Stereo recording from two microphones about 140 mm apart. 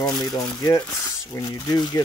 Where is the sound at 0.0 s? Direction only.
25° left (ahead or behind).